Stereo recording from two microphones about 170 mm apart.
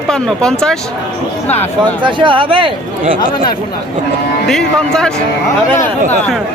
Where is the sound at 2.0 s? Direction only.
30° right (ahead or behind).